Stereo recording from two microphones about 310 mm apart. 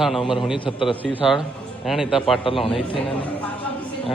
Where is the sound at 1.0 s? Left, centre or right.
Centre.